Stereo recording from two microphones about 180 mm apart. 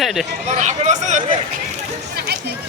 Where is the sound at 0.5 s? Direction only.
40° right (ahead or behind).